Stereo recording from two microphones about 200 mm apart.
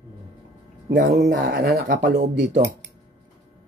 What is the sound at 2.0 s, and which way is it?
Speech, 60° right (ahead or behind).